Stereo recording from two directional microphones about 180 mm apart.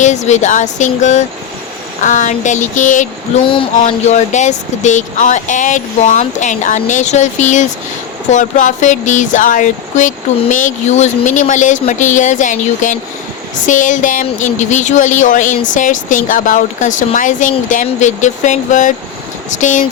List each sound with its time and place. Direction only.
0.0 s speech: 40° left (ahead or behind)
3.4 s a sound: 30° left (ahead or behind)
3.8 s speech: 40° left (ahead or behind)